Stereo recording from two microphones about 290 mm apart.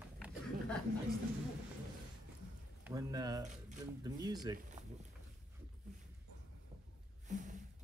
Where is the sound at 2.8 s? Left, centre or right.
Centre.